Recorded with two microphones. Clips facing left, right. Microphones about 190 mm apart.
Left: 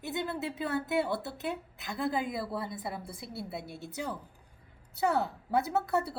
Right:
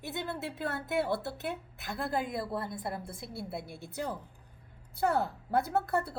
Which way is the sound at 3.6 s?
55° right (ahead or behind).